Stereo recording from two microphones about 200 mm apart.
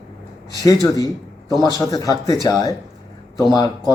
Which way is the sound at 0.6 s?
20° left (ahead or behind).